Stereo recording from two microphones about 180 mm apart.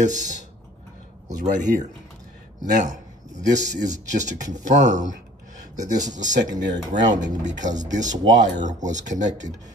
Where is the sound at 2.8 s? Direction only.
45° right (ahead or behind).